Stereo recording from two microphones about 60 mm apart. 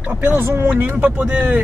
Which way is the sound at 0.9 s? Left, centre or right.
Centre.